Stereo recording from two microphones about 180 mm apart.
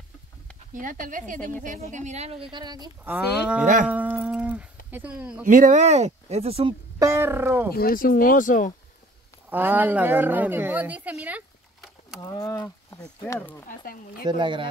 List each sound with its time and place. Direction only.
0.7 s speech: 45° right (ahead or behind)
2.5 s speech: 25° right (ahead or behind)
3.0 s wild animals: 10° right (ahead or behind)
3.8 s a sound: 10° right (ahead or behind)
5.4 s speech: 45° right (ahead or behind)
7.0 s wild animals: 15° right (ahead or behind)
7.7 s speech: 55° left (ahead or behind)
9.5 s a woman's voice: 10° right (ahead or behind)
12.2 s speech: 15° left (ahead or behind)
13.7 s speech: 50° left (ahead or behind)
14.2 s speech: 25° right (ahead or behind)